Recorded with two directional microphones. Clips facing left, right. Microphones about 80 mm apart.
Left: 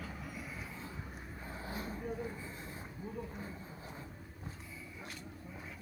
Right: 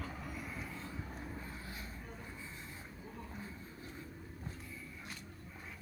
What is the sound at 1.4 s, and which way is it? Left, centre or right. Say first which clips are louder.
Vehicle: left 4 dB; left.